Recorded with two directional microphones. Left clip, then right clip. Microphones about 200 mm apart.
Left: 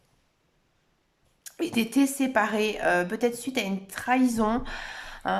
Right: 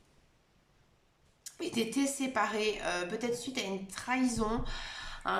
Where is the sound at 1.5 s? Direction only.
40° left (ahead or behind).